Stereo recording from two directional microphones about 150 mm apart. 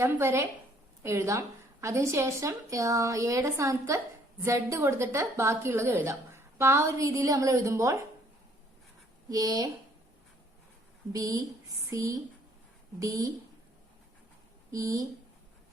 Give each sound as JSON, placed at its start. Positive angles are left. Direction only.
{"t": 0.0, "sound": "a woman's voice", "side_deg": -15}
{"t": 9.3, "sound": "a woman's voice", "side_deg": -25}
{"t": 11.1, "sound": "a woman's voice", "side_deg": -25}
{"t": 14.7, "sound": "a woman's voice", "side_deg": -25}